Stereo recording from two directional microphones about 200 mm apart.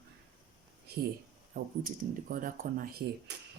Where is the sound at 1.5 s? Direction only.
45° right (ahead or behind).